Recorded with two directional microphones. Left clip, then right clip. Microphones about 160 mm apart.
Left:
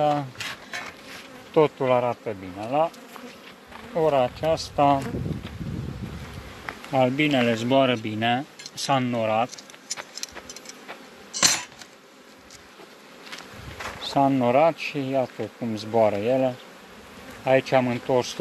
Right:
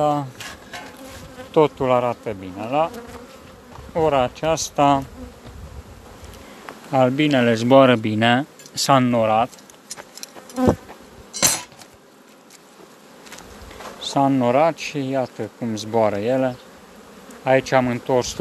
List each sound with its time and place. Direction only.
0.0 s speech: 10° right (ahead or behind)
1.5 s speech: 5° right (ahead or behind)
3.9 s speech: 5° right (ahead or behind)
6.9 s speech: 15° right (ahead or behind)
7.5 s speech: 35° right (ahead or behind)
9.2 s speech: 15° right (ahead or behind)
11.3 s a sound: 40° right (ahead or behind)
14.0 s speech: 5° right (ahead or behind)